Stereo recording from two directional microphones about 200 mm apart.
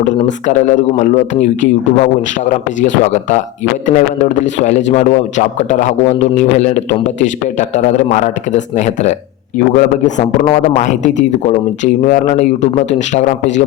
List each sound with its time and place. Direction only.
0.0 s a man's voice: 35° left (ahead or behind)